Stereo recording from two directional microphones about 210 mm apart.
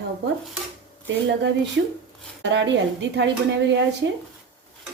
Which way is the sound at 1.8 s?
55° right (ahead or behind).